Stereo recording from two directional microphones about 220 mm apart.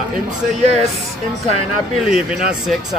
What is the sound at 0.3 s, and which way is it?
Speech, 30° right (ahead or behind).